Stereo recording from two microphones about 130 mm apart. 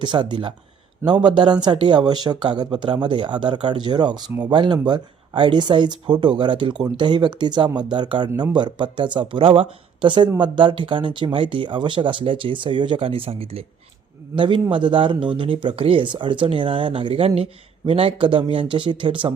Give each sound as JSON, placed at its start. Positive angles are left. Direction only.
{"t": 0.0, "sound": "speech", "side_deg": -35}